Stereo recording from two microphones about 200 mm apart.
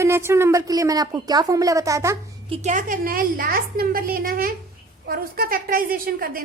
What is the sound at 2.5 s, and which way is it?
A woman's voice, 35° right (ahead or behind).